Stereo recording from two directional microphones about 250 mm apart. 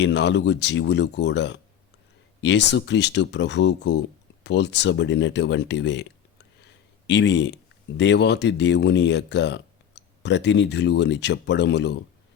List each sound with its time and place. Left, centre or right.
0.0 s speech: left
7.1 s speech: left